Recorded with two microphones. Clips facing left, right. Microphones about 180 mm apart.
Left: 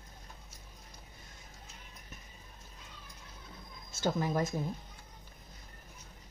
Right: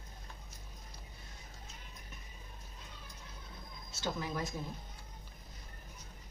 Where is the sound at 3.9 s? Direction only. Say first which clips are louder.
Left 7 dB; 45° left (ahead or behind).